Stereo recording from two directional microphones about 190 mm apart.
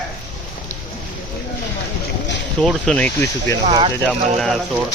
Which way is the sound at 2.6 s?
5° left (ahead or behind).